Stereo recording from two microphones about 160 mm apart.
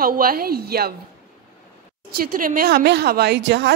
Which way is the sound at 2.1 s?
65° right (ahead or behind).